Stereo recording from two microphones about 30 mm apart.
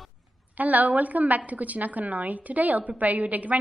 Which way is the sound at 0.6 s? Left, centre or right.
Right.